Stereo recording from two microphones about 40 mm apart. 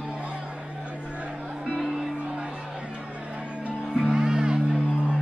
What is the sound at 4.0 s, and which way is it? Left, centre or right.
Music, centre.